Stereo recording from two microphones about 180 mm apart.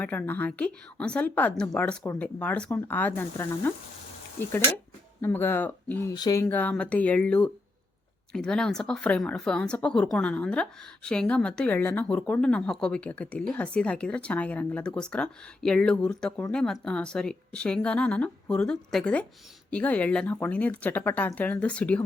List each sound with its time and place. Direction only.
0.0 s a woman's voice: 10° left (ahead or behind)
5.2 s a woman's voice: 10° left (ahead or behind)
6.4 s a woman's voice: 10° left (ahead or behind)